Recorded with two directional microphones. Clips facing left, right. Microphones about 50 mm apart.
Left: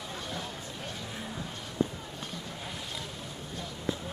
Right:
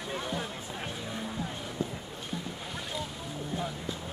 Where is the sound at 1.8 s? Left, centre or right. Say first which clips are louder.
Left 5 dB; left.